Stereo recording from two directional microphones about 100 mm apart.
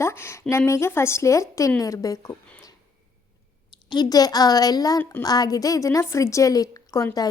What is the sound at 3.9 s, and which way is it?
A woman's voice, 40° left (ahead or behind).